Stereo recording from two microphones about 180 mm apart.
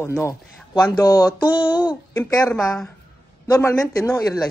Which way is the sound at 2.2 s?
5° left (ahead or behind).